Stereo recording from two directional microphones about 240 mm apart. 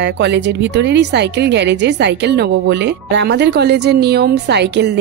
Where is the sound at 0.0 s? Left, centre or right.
Right.